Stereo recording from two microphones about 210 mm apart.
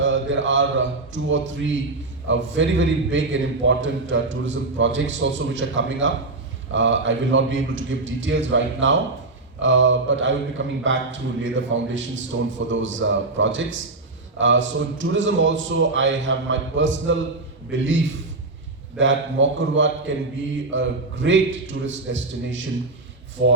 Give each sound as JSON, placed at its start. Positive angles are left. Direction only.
{"t": 0.0, "sound": "a man's voice", "side_deg": -60}